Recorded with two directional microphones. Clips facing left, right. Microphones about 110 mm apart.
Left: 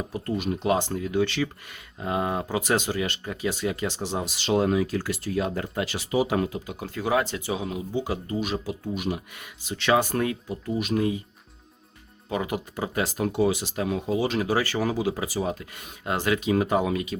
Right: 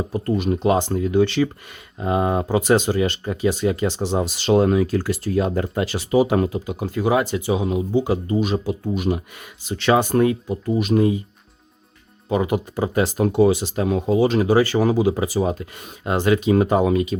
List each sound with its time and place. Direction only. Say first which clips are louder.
0.1 s speech: right 7 dB; 40° right (ahead or behind)
4.2 s speech: right 6 dB; 40° right (ahead or behind)
6.7 s speech: right 6 dB; 15° right (ahead or behind)
7.6 s speech: right 8 dB; 30° right (ahead or behind)
12.3 s speech: right 7 dB; 25° right (ahead or behind)